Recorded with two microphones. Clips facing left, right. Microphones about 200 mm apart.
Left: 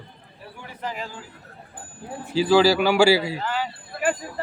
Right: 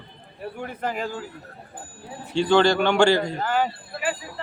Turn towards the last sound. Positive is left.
turn(degrees=50)  # may be behind; listen again after turning